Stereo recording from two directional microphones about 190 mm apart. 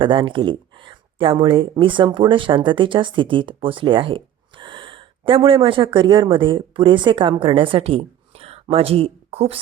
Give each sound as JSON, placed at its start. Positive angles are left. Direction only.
{"t": 0.0, "sound": "speech", "side_deg": -25}